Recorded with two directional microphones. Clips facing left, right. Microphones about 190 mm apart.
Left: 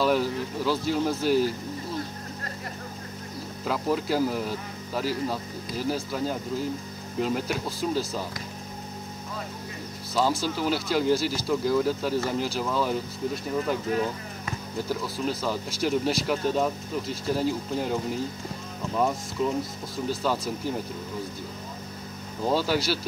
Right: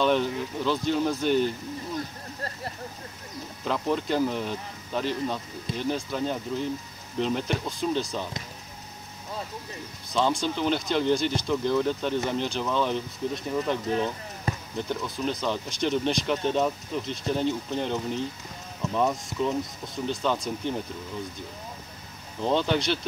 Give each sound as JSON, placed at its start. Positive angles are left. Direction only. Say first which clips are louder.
{"t": 0.0, "sound": "speech", "louder": "even", "side_deg": 5}
{"t": 3.6, "sound": "speech", "louder": "even", "side_deg": 5}
{"t": 10.1, "sound": "speech", "louder": "even", "side_deg": 5}
{"t": 13.8, "sound": "speech", "louder": "even", "side_deg": -30}
{"t": 14.8, "sound": "speech", "louder": "left 2 dB", "side_deg": 5}
{"t": 22.4, "sound": "speech", "louder": "even", "side_deg": 5}